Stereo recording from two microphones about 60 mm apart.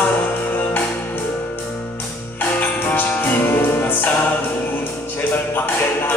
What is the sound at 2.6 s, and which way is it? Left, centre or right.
Music, left.